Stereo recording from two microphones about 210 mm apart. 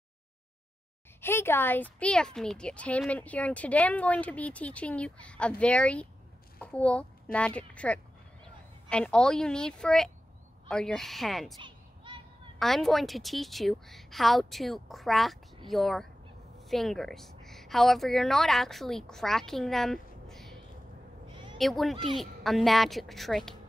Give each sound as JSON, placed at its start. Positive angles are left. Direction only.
{"t": 1.2, "sound": "a child's voice", "side_deg": 10}
{"t": 11.6, "sound": "a sound", "side_deg": -25}
{"t": 12.5, "sound": "a woman's voice", "side_deg": 0}